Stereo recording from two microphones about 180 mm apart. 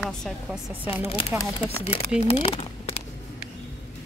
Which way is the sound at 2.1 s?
30° left (ahead or behind).